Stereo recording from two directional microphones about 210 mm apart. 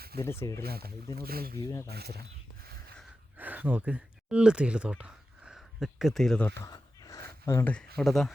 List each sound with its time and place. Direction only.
0.2 s speech: 15° left (ahead or behind)
0.6 s speech: 45° right (ahead or behind)
1.5 s speech: 15° left (ahead or behind)
1.9 s speech: 50° right (ahead or behind)
3.0 s a sound: 10° right (ahead or behind)
6.7 s a sound: 15° left (ahead or behind)
7.9 s speech: centre (ahead or behind)